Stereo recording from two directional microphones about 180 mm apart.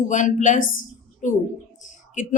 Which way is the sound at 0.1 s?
45° left (ahead or behind).